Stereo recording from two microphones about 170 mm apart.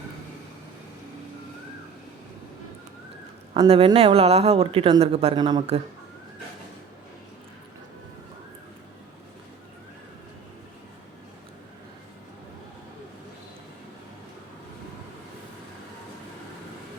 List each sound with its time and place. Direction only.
3.5 s speech: 35° right (ahead or behind)